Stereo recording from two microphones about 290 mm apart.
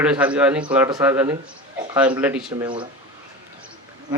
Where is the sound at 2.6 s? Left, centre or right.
Centre.